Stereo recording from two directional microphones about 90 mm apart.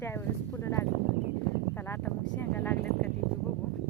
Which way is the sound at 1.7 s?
25° left (ahead or behind).